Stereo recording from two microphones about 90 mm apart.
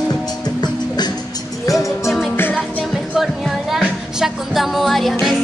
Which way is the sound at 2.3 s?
25° left (ahead or behind).